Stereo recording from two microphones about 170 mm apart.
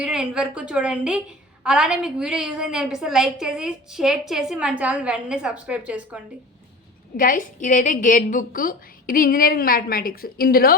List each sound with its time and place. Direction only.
0.0 s a woman's voice: 5° right (ahead or behind)
7.2 s a woman's voice: 55° left (ahead or behind)